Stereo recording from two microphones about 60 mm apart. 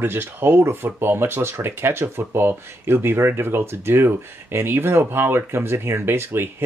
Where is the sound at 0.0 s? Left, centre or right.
Right.